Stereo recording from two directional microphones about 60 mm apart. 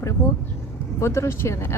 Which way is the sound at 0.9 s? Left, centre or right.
Left.